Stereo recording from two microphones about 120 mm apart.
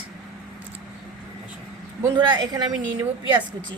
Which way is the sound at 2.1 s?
40° right (ahead or behind).